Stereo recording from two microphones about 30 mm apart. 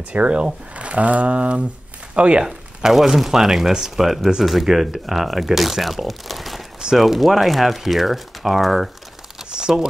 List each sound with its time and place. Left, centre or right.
0.1 s speech: right
2.4 s speech: centre
9.5 s crumpling: right